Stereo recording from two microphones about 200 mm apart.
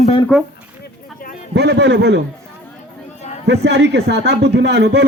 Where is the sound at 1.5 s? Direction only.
60° right (ahead or behind).